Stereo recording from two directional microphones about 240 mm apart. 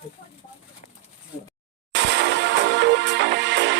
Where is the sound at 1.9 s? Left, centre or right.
Right.